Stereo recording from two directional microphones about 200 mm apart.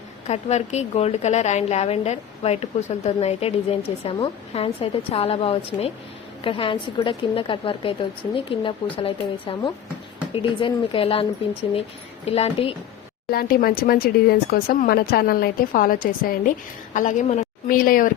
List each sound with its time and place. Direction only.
0.3 s a woman's voice: 35° left (ahead or behind)
13.3 s a woman's voice: 50° left (ahead or behind)